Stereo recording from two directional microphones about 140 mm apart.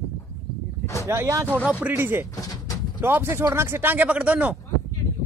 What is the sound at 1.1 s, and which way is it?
Speech, 20° right (ahead or behind).